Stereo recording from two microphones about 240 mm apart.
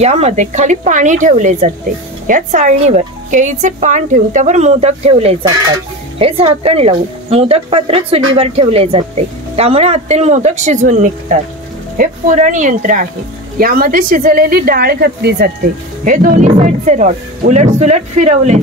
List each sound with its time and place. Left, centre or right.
0.0 s speech: right